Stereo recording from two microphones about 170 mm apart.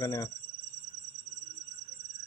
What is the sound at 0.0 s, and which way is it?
Speech, 20° left (ahead or behind).